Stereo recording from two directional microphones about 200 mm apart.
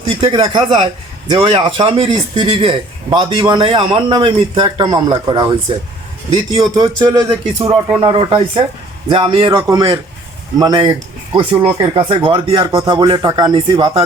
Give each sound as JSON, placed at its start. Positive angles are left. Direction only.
{"t": 0.2, "sound": "a man's voice", "side_deg": -25}